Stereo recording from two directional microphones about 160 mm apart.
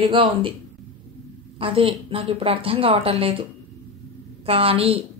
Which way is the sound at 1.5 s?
35° right (ahead or behind).